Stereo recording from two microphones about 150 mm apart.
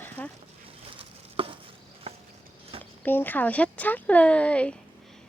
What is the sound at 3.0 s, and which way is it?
Speech, 15° left (ahead or behind).